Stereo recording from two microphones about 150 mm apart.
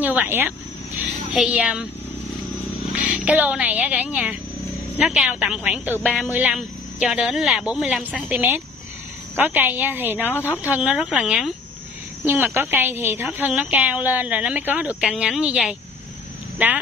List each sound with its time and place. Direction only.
0.0 s speech: 10° right (ahead or behind)
2.9 s speech: 5° right (ahead or behind)
8.4 s a woman's voice: 15° right (ahead or behind)
10.3 s speech: 15° left (ahead or behind)
10.6 s a woman's voice: 10° right (ahead or behind)